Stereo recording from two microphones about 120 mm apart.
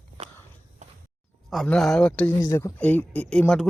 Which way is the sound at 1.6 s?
5° left (ahead or behind).